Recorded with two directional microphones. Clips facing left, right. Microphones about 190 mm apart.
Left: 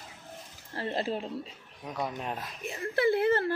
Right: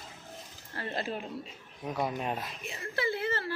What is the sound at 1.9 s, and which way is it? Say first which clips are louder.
Speech: right 2 dB; 5° right (ahead or behind).